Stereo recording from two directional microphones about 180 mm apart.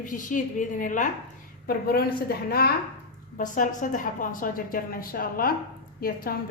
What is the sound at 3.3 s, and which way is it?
A woman's voice, 45° left (ahead or behind).